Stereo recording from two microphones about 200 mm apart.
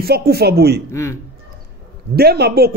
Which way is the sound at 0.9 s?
15° left (ahead or behind).